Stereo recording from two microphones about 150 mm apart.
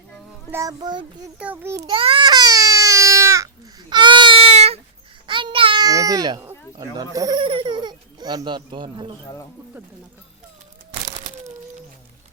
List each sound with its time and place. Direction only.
0.5 s a child's voice: 25° right (ahead or behind)
1.4 s a child's voice: 10° right (ahead or behind)
1.9 s baby cry: 35° right (ahead or behind)
5.2 s babbling: 35° right (ahead or behind)
6.7 s speech: 25° right (ahead or behind)